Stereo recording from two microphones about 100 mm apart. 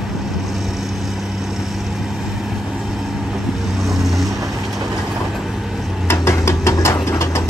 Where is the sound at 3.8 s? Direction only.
Centre (ahead or behind).